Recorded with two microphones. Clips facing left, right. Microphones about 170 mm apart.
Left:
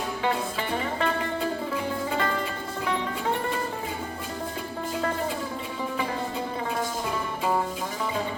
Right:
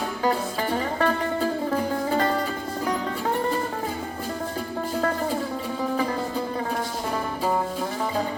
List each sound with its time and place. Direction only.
0.8 s music: 40° right (ahead or behind)